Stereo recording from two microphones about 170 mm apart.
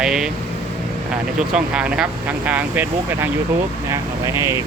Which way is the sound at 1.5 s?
5° right (ahead or behind).